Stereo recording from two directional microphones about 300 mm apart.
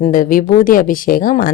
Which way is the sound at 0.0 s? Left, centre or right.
Left.